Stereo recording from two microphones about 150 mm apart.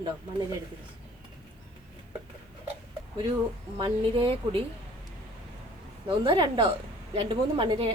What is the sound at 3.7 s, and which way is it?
Speech, 35° right (ahead or behind).